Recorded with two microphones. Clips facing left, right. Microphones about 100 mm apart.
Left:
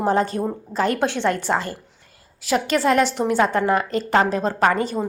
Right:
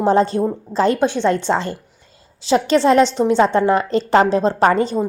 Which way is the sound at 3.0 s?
15° left (ahead or behind).